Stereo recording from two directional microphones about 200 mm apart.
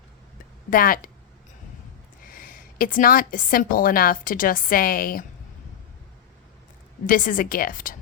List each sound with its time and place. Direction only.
0.7 s a woman's voice: 45° left (ahead or behind)
2.2 s a woman's voice: 45° left (ahead or behind)
7.1 s a woman's voice: 40° left (ahead or behind)